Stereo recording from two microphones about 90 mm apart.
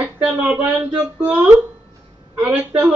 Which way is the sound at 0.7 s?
15° right (ahead or behind).